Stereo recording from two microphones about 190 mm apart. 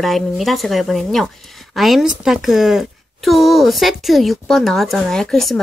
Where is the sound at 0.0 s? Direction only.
Centre (ahead or behind).